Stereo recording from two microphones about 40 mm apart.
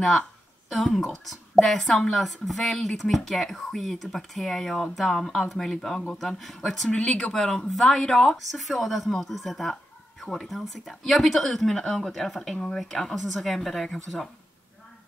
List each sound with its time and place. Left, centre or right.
0.7 s speech: centre
8.0 s speech: centre
8.4 s speech: centre